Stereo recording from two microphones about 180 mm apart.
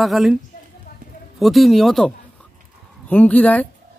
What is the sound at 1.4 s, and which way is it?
Speech, centre (ahead or behind).